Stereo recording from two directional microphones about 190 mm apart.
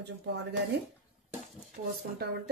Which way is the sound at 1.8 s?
45° right (ahead or behind).